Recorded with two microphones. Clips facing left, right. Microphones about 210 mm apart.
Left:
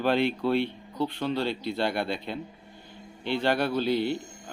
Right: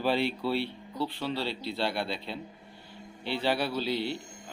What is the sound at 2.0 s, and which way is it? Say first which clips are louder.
Speech: left 4 dB; 50° left (ahead or behind).